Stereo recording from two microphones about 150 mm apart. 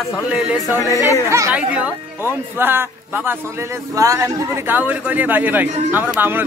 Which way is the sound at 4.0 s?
20° right (ahead or behind).